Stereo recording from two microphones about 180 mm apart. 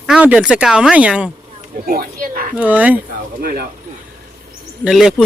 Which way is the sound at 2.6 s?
10° right (ahead or behind).